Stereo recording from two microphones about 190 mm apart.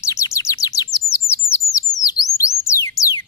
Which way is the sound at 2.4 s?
15° left (ahead or behind).